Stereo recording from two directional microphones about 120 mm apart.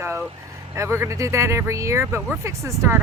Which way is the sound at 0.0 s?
20° right (ahead or behind).